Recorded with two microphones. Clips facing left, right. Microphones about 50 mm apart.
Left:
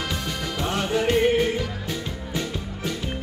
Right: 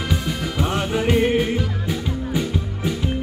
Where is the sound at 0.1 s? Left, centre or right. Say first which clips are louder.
Right 4 dB; centre.